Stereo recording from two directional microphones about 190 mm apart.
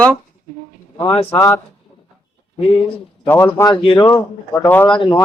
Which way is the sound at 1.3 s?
15° left (ahead or behind).